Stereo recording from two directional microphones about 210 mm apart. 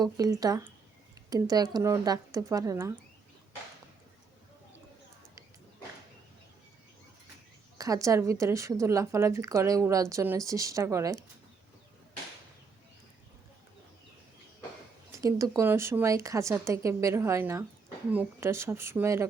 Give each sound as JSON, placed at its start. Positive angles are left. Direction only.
{"t": 0.0, "sound": "a woman's voice", "side_deg": -15}
{"t": 7.8, "sound": "a woman's voice", "side_deg": -15}
{"t": 15.2, "sound": "a woman's voice", "side_deg": -15}